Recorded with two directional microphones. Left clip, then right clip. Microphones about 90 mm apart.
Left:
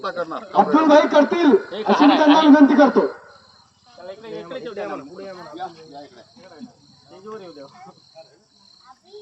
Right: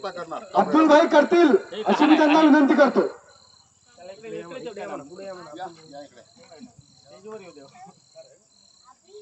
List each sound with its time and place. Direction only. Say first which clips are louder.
0.0 s speech: left 6 dB; 5° left (ahead or behind)
0.5 s a man's voice: left 3 dB; 45° right (ahead or behind)
1.7 s speech: left 3 dB; 35° left (ahead or behind)
2.4 s a man's voice: left 4 dB; 45° right (ahead or behind)
4.7 s speech: left 5 dB; 30° right (ahead or behind)
6.6 s speech: left 6 dB; 5° right (ahead or behind)